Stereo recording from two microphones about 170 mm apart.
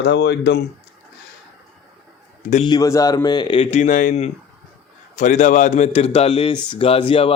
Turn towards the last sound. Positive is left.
turn(degrees=30)  # may be behind; listen again after turning